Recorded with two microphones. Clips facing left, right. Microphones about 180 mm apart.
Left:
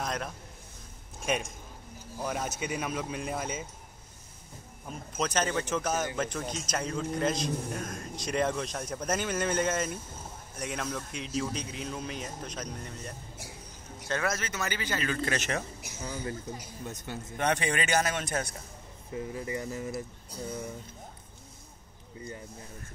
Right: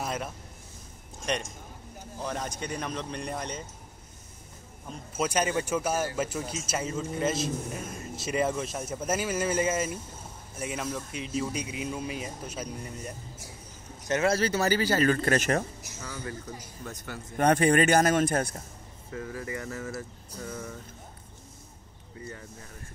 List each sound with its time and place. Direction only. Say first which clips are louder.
0.0 s a sound: right 1 dB; 5° right (ahead or behind)
1.2 s speech: even; 5° left (ahead or behind)
5.1 s a man's voice: right 2 dB; 10° right (ahead or behind)
14.3 s speech: right 9 dB; 35° right (ahead or behind)
16.0 s a man's voice: left 2 dB; 25° left (ahead or behind)
17.4 s speech: right 8 dB; 50° right (ahead or behind)
19.1 s speech: left 1 dB; 20° left (ahead or behind)